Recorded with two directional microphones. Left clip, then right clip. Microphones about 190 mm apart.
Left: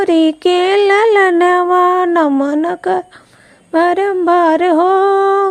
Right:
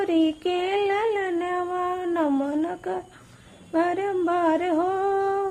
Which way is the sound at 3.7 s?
40° left (ahead or behind).